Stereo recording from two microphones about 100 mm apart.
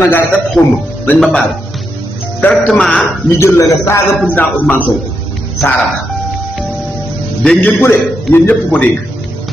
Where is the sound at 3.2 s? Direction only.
25° left (ahead or behind).